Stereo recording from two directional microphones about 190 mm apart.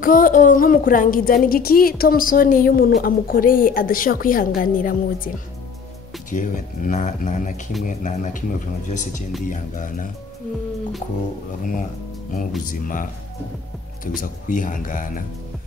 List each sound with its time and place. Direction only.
0.0 s a woman's voice: 45° left (ahead or behind)
6.3 s a man's voice: 40° left (ahead or behind)
12.6 s a woman's voice: 45° left (ahead or behind)
14.2 s a woman's voice: 40° left (ahead or behind)